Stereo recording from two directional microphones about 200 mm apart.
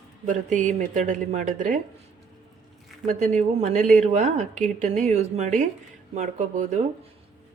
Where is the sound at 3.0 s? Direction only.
35° right (ahead or behind).